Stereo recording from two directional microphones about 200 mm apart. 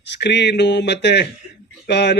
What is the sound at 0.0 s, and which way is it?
A man's voice, 60° left (ahead or behind).